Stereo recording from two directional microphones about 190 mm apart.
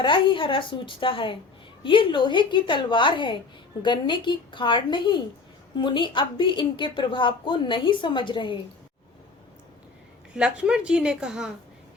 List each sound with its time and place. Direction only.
0.0 s a woman's voice: 25° left (ahead or behind)
10.3 s a woman's voice: 5° right (ahead or behind)